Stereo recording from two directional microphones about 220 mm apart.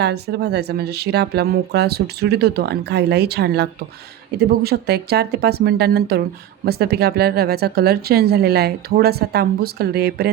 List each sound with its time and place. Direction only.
0.0 s speech: 50° right (ahead or behind)